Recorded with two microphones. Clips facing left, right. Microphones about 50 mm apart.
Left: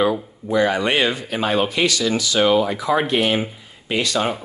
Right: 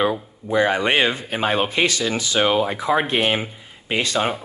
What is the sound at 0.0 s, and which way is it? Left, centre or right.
Speech, right.